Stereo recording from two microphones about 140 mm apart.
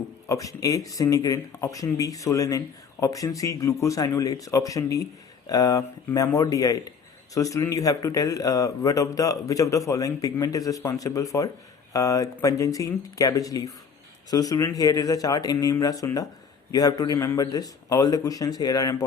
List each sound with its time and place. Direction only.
0.3 s speech: 25° left (ahead or behind)